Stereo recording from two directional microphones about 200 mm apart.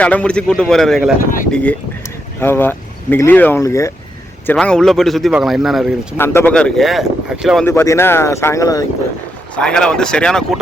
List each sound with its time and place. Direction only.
0.0 s a man's voice: 5° left (ahead or behind)
1.2 s speech: 45° left (ahead or behind)
1.5 s a man's voice: 5° left (ahead or behind)
4.4 s a man's voice: 5° left (ahead or behind)
6.1 s a man's voice: 10° left (ahead or behind)
7.6 s speech: 10° left (ahead or behind)
9.6 s a man's voice: 5° left (ahead or behind)